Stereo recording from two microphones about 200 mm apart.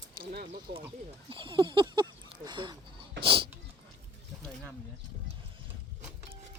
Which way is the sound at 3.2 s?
25° right (ahead or behind).